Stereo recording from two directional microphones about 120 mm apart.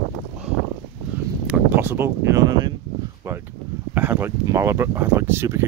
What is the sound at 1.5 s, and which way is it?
Speech, 20° right (ahead or behind).